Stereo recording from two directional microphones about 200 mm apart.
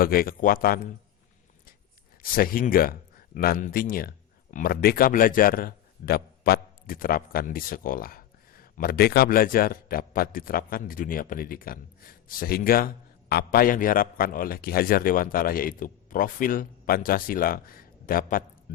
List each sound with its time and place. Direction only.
0.0 s a man's voice: 45° left (ahead or behind)
2.3 s a man's voice: 45° left (ahead or behind)